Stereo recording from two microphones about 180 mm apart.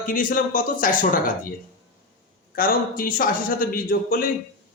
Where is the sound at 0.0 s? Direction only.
50° left (ahead or behind).